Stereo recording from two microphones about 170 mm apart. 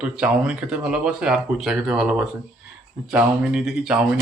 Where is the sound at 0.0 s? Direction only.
5° right (ahead or behind).